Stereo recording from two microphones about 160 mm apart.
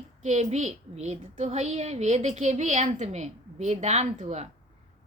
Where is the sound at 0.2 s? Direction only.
45° right (ahead or behind).